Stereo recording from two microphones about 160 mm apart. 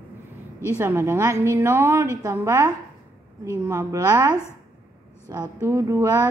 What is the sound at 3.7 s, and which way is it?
A woman's voice, 20° right (ahead or behind).